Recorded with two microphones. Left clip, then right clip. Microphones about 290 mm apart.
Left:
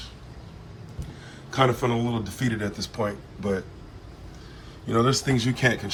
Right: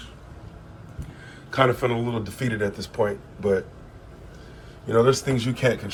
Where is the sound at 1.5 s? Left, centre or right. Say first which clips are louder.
Right 2 dB; centre.